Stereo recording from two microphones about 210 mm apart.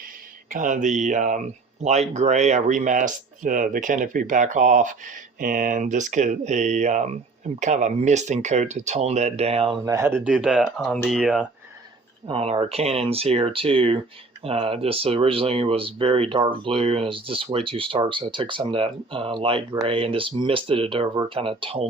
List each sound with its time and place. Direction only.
0.5 s speech: 40° right (ahead or behind)
9.9 s speech: 10° right (ahead or behind)
12.3 s speech: 25° right (ahead or behind)